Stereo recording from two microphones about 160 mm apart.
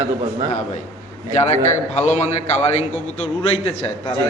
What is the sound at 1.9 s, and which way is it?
Speech, 45° left (ahead or behind).